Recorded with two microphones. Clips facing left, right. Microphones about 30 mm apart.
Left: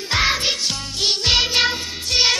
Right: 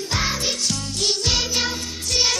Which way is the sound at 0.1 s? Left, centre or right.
Left.